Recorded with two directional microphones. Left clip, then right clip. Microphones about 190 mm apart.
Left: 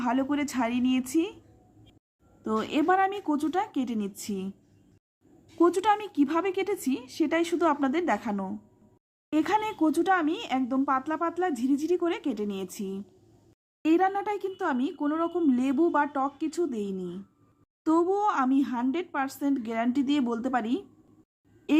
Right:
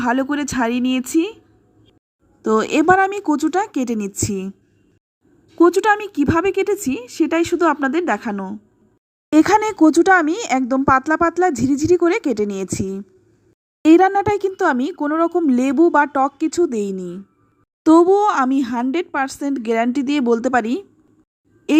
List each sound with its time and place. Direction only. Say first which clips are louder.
0.0 s speech: right 8 dB; 25° right (ahead or behind)
2.4 s speech: right 11 dB; 30° right (ahead or behind)
5.5 s speech: right 9 dB; 25° right (ahead or behind)
9.3 s speech: right 12 dB; 35° right (ahead or behind)